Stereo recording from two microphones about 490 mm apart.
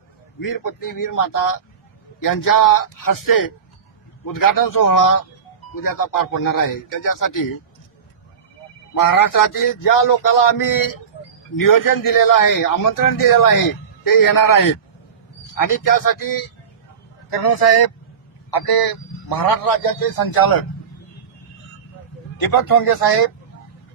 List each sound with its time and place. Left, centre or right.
0.4 s a man's voice: left
9.0 s a man's voice: left
22.6 s speech: left